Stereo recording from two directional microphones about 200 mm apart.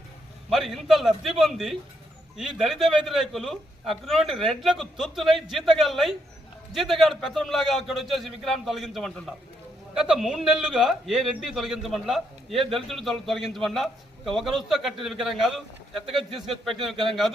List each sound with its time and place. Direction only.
0.5 s a man's voice: centre (ahead or behind)